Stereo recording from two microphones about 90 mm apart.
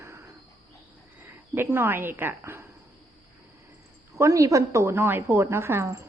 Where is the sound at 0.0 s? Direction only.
30° right (ahead or behind).